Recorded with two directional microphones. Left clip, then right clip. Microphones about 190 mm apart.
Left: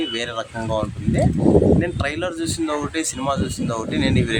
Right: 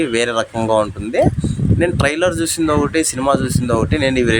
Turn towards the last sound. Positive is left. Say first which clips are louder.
# right 6 dB
turn(degrees=-35)  # may be behind; listen again after turning